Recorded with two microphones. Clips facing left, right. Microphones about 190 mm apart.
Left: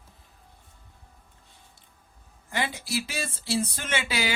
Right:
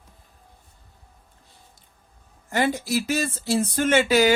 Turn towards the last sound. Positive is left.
turn(degrees=-45)  # may be behind; listen again after turning